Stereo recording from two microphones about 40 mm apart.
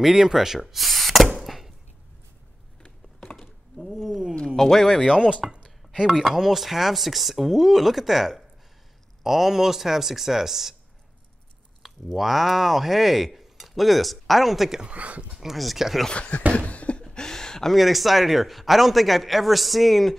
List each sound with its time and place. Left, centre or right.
0.0 s speech: centre
1.4 s a sound: centre
3.3 s a sound: centre
4.6 s speech: centre
4.8 s a man's voice: centre
5.1 s a man's voice: right
11.8 s cutlery: centre
14.8 s speech: right
15.4 s a man's voice: centre
16.1 s speech: left
16.5 s a sound: left
17.0 s a sound: centre
17.7 s a man's voice: centre